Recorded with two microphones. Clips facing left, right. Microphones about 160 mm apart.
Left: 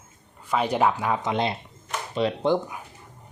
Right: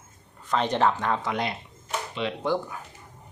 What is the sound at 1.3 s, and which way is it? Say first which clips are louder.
Speech: left 4 dB; 25° left (ahead or behind).